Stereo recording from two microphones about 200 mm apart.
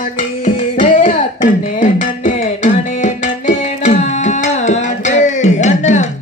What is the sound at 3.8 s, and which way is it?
Tabla, 35° left (ahead or behind).